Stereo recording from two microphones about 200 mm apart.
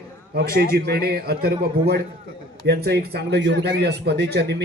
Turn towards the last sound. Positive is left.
turn(degrees=-55)  # may be behind; listen again after turning